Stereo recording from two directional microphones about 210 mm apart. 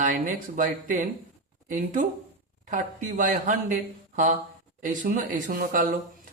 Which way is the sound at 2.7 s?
35° right (ahead or behind).